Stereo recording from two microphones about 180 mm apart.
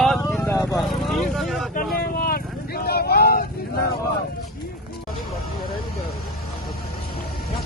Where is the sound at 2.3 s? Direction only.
60° left (ahead or behind).